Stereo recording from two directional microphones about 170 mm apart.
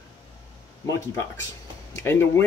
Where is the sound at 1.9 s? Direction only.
15° left (ahead or behind).